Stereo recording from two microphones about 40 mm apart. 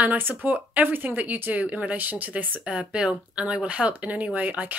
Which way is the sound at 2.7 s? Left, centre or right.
Right.